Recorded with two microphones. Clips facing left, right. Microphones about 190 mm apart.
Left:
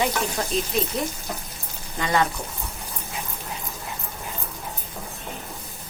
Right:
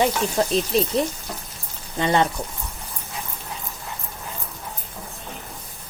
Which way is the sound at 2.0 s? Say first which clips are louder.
Right 3 dB; 25° right (ahead or behind).